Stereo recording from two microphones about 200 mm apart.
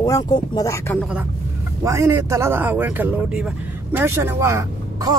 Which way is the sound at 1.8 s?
15° right (ahead or behind).